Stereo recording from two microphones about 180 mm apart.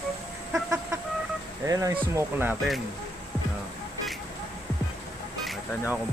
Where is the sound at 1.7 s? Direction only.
20° right (ahead or behind).